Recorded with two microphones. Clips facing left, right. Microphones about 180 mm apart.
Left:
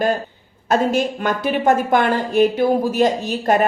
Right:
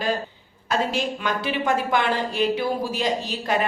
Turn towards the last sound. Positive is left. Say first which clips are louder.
# left 7 dB
turn(degrees=50)  # may be behind; listen again after turning